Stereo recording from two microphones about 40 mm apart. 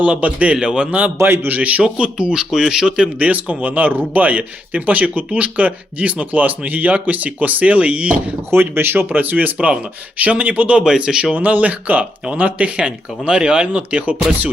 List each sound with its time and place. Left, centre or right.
0.0 s speech: right
0.5 s speech: right
1.2 s speech: right
1.5 s speech: right
1.8 s speech: right
2.3 s a man's voice: centre
3.2 s speech: right
8.4 s speech: right
9.0 s speech: right
10.8 s speech: centre
11.3 s speech: right
12.7 s speech: right